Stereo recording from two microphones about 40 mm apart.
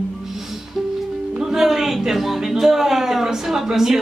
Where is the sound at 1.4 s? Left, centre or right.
Centre.